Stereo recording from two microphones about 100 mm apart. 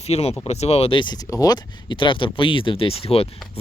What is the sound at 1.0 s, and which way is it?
Speech, 45° left (ahead or behind).